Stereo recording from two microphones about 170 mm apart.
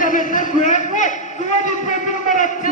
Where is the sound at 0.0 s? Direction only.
50° left (ahead or behind).